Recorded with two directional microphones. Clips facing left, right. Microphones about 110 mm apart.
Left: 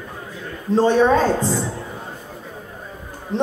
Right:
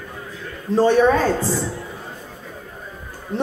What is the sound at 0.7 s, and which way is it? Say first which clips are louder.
Speech: even; 20° left (ahead or behind).